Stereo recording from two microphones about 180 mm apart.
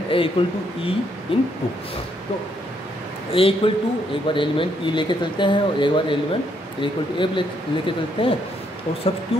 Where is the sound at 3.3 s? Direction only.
30° left (ahead or behind).